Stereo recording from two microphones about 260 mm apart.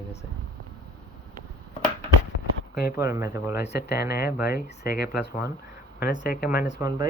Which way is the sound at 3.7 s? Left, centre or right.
Left.